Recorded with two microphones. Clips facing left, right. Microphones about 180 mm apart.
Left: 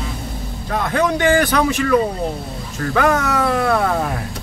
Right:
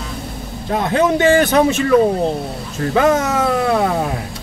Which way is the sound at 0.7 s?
25° right (ahead or behind).